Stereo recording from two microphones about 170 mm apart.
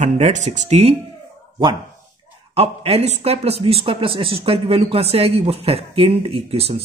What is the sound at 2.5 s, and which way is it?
Speech, 35° right (ahead or behind).